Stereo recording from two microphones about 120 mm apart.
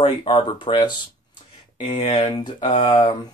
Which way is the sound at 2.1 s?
35° left (ahead or behind).